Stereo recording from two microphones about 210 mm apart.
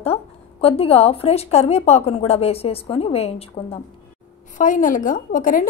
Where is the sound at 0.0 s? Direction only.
30° left (ahead or behind).